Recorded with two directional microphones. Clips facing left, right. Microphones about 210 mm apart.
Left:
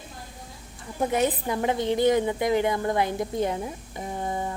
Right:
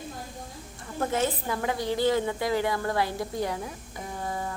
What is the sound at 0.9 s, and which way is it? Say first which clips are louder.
A woman's voice: left 3 dB; 15° left (ahead or behind).